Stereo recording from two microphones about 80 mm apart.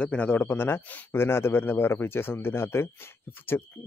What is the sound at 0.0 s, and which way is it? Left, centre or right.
Speech, centre.